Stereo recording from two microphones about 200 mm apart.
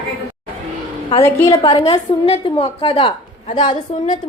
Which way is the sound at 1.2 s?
15° left (ahead or behind).